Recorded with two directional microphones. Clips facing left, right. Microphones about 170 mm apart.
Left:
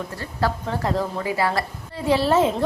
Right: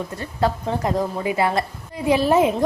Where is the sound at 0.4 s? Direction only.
15° right (ahead or behind).